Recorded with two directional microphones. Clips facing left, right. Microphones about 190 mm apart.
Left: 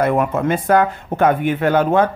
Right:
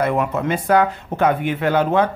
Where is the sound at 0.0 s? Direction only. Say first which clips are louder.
Left 3 dB; 50° left (ahead or behind).